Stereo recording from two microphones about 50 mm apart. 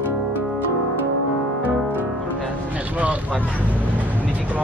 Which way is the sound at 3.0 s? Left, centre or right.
Right.